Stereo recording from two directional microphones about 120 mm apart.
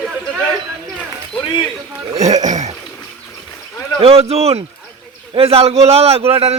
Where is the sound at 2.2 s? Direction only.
80° right.